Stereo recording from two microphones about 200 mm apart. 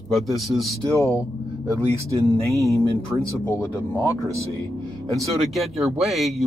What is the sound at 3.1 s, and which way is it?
Speech, 15° right (ahead or behind).